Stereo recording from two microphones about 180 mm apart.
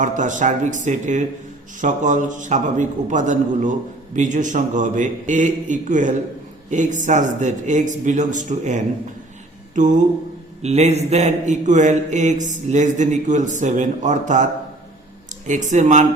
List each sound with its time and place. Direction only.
0.0 s a man's voice: 45° right (ahead or behind)
10.6 s speech: 35° right (ahead or behind)
15.4 s a man's voice: 40° right (ahead or behind)